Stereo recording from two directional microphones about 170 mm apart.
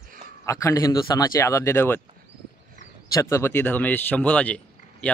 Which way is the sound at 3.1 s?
15° left (ahead or behind).